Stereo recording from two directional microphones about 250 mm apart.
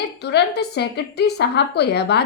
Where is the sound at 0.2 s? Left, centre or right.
Left.